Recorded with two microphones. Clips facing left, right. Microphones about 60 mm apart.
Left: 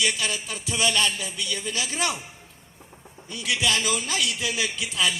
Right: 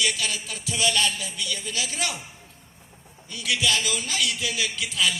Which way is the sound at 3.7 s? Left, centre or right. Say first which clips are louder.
Left 1 dB; left.